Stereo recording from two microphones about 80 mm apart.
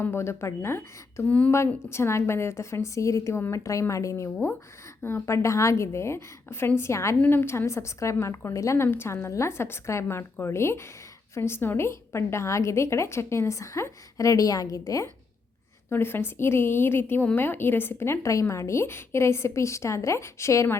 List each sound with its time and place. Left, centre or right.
0.0 s a woman's voice: left
15.9 s a woman's voice: left